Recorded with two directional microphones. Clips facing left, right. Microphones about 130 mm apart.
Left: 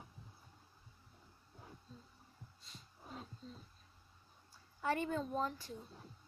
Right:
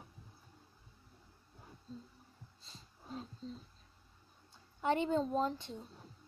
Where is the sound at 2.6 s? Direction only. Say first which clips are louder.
Right 1 dB; 30° right (ahead or behind).